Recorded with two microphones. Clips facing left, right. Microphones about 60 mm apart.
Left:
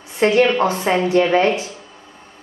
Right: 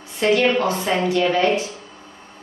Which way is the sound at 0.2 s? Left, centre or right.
Left.